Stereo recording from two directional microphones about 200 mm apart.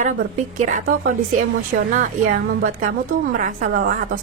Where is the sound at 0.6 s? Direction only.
40° right (ahead or behind).